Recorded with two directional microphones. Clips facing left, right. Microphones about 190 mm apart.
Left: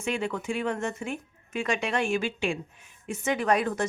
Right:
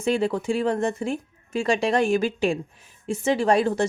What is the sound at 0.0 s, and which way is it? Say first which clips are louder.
A woman's voice: right 7 dB; 35° right (ahead or behind).